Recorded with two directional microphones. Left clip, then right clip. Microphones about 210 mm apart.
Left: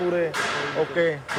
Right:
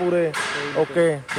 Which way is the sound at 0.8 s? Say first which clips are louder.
Right 5 dB; 45° right (ahead or behind).